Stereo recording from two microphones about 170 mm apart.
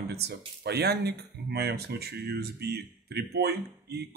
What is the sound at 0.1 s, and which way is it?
Speech, 70° right (ahead or behind).